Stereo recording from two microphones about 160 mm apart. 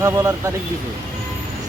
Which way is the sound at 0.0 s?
20° right (ahead or behind).